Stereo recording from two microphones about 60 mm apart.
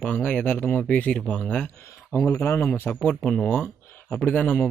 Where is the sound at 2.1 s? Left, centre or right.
Left.